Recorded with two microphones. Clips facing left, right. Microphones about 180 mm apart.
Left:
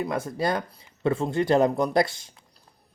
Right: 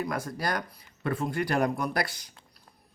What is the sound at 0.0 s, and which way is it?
Speech, 25° left (ahead or behind).